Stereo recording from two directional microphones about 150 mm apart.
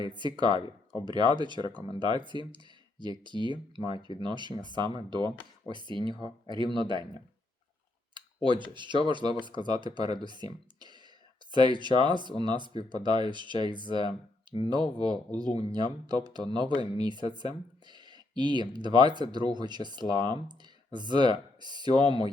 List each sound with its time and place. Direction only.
0.0 s speech: 30° right (ahead or behind)
8.1 s speech: 30° right (ahead or behind)
10.2 s a sound: 30° right (ahead or behind)
11.5 s speech: 30° right (ahead or behind)